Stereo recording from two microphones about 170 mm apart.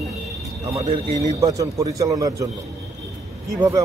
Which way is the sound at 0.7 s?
35° right (ahead or behind).